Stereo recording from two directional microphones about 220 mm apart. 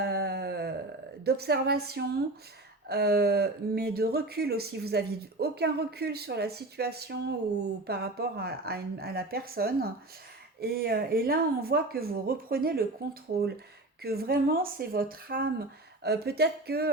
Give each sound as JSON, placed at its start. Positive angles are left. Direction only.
{"t": 0.0, "sound": "a sound", "side_deg": -45}
{"t": 1.2, "sound": "speech", "side_deg": -45}
{"t": 14.0, "sound": "speech", "side_deg": -45}